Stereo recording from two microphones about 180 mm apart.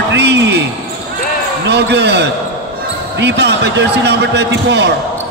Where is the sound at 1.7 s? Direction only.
70° right (ahead or behind).